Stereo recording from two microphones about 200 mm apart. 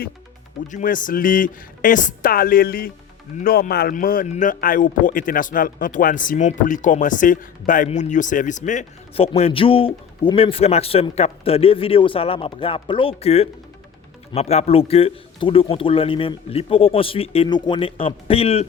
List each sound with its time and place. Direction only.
0.7 s a man's voice: 40° left (ahead or behind)